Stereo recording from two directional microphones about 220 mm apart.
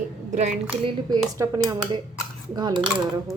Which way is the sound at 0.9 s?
15° right (ahead or behind).